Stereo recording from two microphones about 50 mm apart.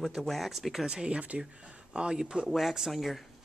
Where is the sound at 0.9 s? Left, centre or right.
Centre.